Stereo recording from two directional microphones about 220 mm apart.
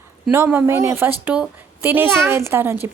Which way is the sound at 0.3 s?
10° right (ahead or behind).